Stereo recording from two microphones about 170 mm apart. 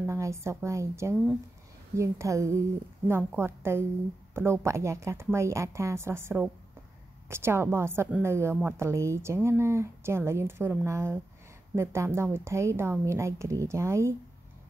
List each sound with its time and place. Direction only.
0.0 s a woman's voice: 15° right (ahead or behind)